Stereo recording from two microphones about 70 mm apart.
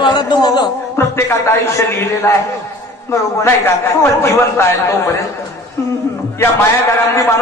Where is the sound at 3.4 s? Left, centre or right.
Left.